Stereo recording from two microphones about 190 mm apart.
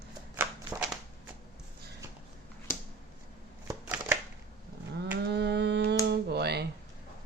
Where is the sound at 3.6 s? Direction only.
10° right (ahead or behind).